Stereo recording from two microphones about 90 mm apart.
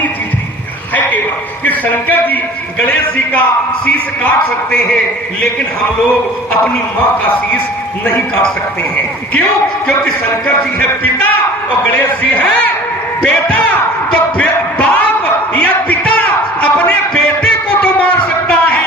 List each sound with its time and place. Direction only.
1.6 s a man's voice: 20° left (ahead or behind)
8.0 s speech: 10° left (ahead or behind)
10.4 s speech: 15° left (ahead or behind)
13.2 s a sound: 15° left (ahead or behind)